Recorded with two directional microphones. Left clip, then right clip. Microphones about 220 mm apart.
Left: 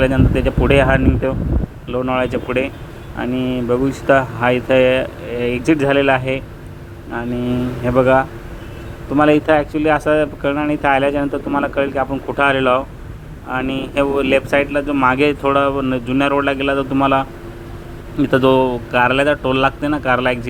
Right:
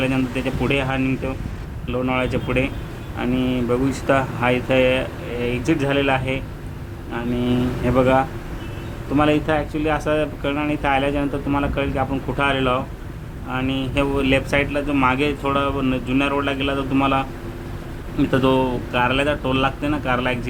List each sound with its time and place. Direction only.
0.0 s speech: 10° left (ahead or behind)
18.3 s speech: 15° left (ahead or behind)